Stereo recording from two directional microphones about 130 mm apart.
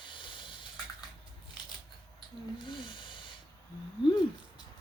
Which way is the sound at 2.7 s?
40° left (ahead or behind).